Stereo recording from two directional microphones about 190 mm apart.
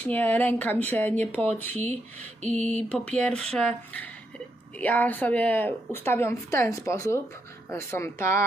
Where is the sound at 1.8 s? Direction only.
35° right (ahead or behind).